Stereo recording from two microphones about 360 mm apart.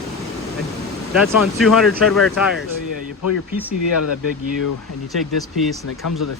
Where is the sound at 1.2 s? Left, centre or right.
Centre.